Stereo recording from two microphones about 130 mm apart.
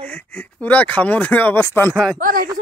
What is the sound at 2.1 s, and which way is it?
Speech, 90° right.